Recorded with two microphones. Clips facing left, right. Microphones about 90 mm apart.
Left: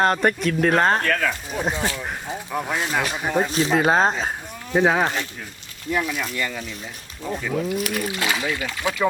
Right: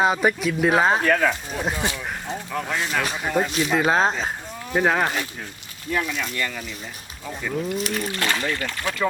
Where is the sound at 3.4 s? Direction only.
35° left (ahead or behind).